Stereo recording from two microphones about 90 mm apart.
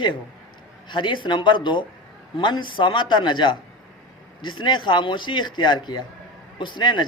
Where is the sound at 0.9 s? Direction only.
60° left (ahead or behind).